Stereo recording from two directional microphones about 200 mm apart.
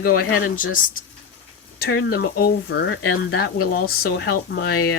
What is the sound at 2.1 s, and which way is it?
Speech, 50° left (ahead or behind).